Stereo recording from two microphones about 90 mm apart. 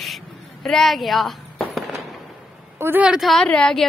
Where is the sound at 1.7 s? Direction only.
Centre (ahead or behind).